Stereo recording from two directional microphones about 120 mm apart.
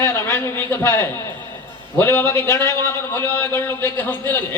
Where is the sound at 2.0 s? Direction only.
20° left (ahead or behind).